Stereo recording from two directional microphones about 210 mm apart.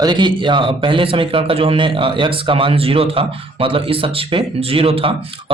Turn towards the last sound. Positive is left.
turn(degrees=-25)  # may be behind; listen again after turning